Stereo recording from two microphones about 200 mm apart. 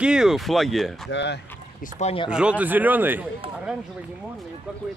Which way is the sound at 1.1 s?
60° left (ahead or behind).